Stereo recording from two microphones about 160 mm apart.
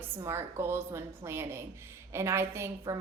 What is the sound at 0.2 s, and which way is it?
A woman's voice, 15° right (ahead or behind).